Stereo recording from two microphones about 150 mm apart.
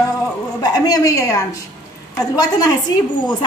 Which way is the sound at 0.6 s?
25° left (ahead or behind).